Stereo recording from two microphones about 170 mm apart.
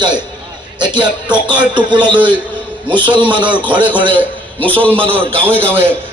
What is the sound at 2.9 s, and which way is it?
Speech, 30° right (ahead or behind).